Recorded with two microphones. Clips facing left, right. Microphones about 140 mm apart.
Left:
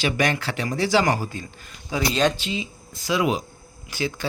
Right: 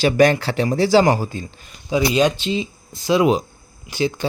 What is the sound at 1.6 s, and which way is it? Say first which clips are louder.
Speech: right 6 dB; 15° right (ahead or behind).